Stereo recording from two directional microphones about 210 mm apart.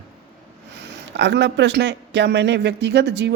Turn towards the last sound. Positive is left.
turn(degrees=-55)  # may be behind; listen again after turning